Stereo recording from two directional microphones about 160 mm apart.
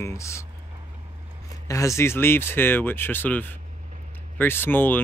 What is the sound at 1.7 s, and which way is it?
Speech, 20° left (ahead or behind).